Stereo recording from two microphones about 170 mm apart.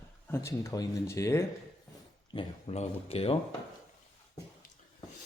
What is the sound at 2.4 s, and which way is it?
Speech, 35° left (ahead or behind).